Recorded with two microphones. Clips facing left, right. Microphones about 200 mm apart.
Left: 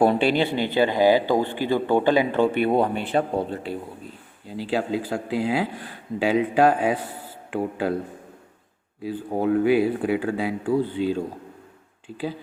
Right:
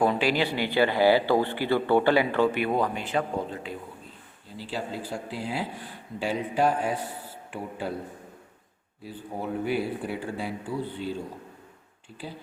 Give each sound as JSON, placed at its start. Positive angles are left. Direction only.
{"t": 0.0, "sound": "speech", "side_deg": 30}
{"t": 4.5, "sound": "speech", "side_deg": 90}
{"t": 9.0, "sound": "speech", "side_deg": 90}